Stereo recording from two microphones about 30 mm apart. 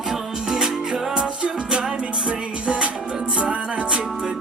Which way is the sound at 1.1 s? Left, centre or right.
Right.